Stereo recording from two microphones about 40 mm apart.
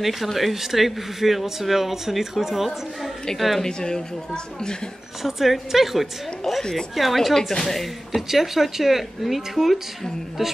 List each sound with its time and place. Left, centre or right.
0.0 s speech: centre
3.6 s a woman's voice: centre
5.2 s speech: centre
8.3 s speech: centre